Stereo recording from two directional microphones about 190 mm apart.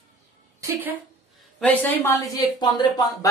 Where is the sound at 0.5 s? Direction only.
15° right (ahead or behind).